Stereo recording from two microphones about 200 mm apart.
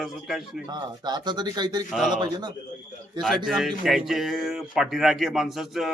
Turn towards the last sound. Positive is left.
turn(degrees=0)  # may be behind; listen again after turning